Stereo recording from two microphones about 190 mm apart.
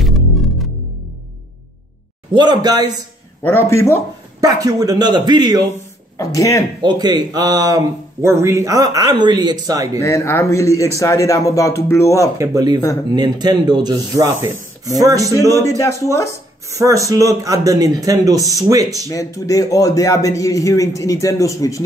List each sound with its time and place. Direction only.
0.0 s music: centre (ahead or behind)
2.3 s speech: 25° right (ahead or behind)
3.4 s a man's voice: 15° left (ahead or behind)
4.4 s speech: 20° right (ahead or behind)
6.1 s a man's voice: 15° left (ahead or behind)
6.8 s speech: 20° right (ahead or behind)
9.9 s a man's voice: 15° left (ahead or behind)
12.4 s speech: 20° right (ahead or behind)
15.5 s a man's voice: 15° left (ahead or behind)
16.3 s speech: 15° right (ahead or behind)
19.0 s a man's voice: 15° left (ahead or behind)